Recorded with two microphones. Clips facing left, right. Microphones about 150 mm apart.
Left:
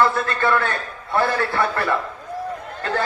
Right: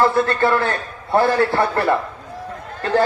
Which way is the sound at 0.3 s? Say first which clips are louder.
Right 3 dB; 35° right (ahead or behind).